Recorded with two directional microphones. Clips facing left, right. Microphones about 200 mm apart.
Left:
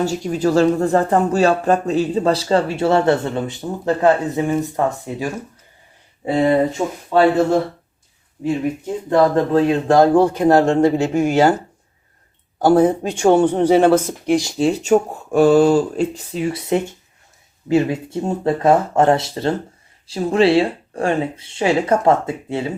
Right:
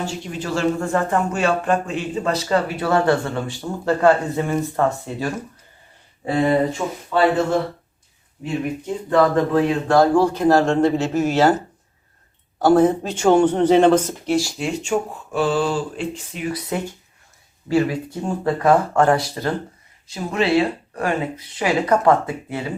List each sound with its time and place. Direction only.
0.0 s speech: 40° left (ahead or behind)
9.0 s speech: 30° left (ahead or behind); by 11.5 s 10° left (ahead or behind)
12.6 s speech: 10° left (ahead or behind)
14.6 s speech: 35° left (ahead or behind)